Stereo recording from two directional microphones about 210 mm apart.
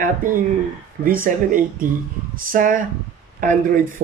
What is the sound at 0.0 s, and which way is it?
Speech, 40° right (ahead or behind).